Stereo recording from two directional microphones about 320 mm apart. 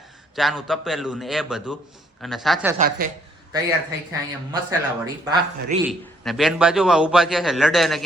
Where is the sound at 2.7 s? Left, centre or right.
Right.